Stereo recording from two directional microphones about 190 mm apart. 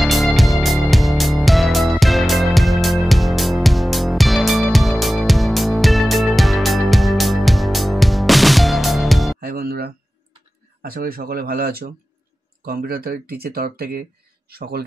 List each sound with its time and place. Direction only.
0.0 s music: centre (ahead or behind)
9.4 s music: 50° right (ahead or behind)
10.8 s speech: 50° right (ahead or behind)